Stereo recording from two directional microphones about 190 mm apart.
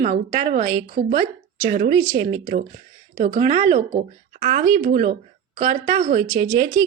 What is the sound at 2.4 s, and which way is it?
Speech, 40° right (ahead or behind).